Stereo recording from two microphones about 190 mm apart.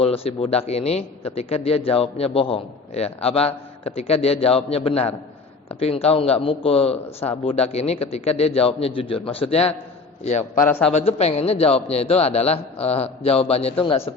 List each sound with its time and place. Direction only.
0.0 s a man's voice: 30° left (ahead or behind)
10.7 s a man's voice: 5° left (ahead or behind)
10.9 s a man's voice: 35° left (ahead or behind)